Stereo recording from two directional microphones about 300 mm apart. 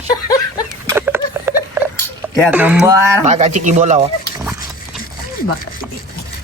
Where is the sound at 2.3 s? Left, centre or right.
Centre.